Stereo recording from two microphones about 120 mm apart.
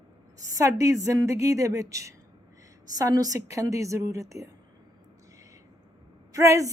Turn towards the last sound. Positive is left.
turn(degrees=-25)  # may be behind; listen again after turning